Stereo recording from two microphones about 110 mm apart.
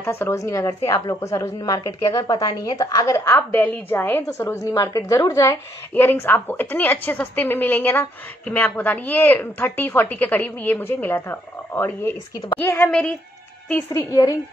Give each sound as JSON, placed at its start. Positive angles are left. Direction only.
{"t": 0.0, "sound": "a woman's voice", "side_deg": 20}
{"t": 3.3, "sound": "a woman's voice", "side_deg": 20}
{"t": 13.9, "sound": "a woman's voice", "side_deg": 30}